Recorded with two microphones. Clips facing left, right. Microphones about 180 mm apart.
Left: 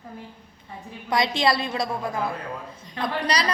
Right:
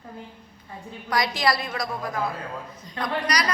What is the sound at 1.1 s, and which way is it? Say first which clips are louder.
A woman's voice: left 2 dB; 25° left (ahead or behind).